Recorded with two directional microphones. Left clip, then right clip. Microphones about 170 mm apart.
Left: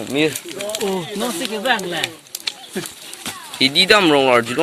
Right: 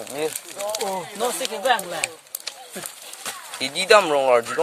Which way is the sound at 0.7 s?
25° right (ahead or behind).